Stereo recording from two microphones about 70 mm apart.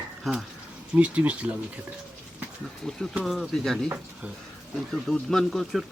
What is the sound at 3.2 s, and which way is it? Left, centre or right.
Speech, centre.